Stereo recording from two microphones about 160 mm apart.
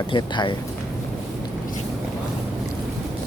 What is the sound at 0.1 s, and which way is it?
Speech, 30° left (ahead or behind).